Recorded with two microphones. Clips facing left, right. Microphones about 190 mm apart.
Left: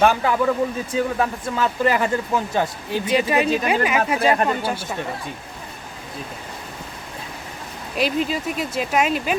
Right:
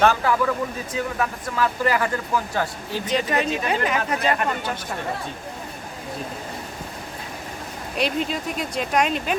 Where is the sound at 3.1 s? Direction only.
10° left (ahead or behind).